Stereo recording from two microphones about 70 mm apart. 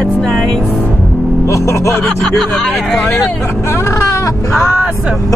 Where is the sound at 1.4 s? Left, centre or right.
Left.